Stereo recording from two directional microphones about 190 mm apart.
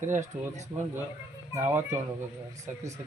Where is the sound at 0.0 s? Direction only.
40° right (ahead or behind).